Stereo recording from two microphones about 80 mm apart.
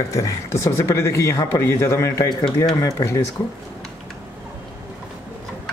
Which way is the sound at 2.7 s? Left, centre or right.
Left.